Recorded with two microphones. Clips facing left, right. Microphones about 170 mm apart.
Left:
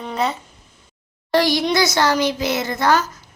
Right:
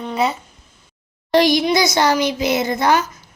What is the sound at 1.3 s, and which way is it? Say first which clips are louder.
A woman's voice: right 3 dB; 20° right (ahead or behind).